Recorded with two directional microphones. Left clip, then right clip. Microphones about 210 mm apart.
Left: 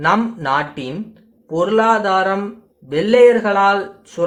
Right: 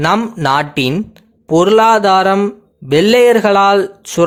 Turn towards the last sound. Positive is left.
turn(degrees=-50)  # may be behind; listen again after turning